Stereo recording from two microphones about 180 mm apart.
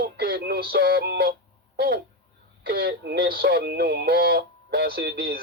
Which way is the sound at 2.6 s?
60° right (ahead or behind).